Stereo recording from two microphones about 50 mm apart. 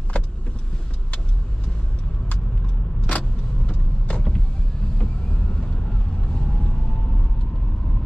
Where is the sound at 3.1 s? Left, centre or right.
Left.